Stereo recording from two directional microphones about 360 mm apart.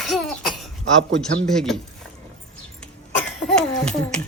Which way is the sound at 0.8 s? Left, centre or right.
Right.